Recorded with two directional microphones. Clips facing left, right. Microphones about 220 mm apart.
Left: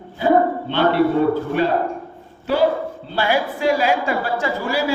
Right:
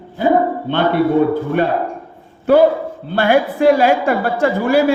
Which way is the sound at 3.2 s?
55° right (ahead or behind).